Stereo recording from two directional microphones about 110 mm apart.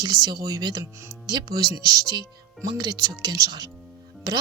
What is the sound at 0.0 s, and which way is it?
Speech, 35° right (ahead or behind).